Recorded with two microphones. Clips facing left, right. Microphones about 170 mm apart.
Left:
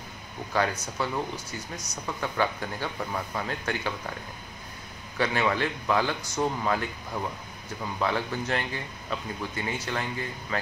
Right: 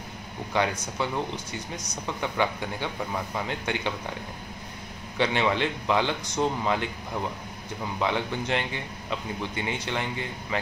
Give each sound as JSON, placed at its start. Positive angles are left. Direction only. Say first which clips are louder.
{"t": 0.5, "sound": "speech", "louder": "right 1 dB", "side_deg": -20}
{"t": 1.3, "sound": "speech", "louder": "right 2 dB", "side_deg": 5}
{"t": 2.1, "sound": "speech", "louder": "right 1 dB", "side_deg": -20}
{"t": 5.1, "sound": "speech", "louder": "right 1 dB", "side_deg": -25}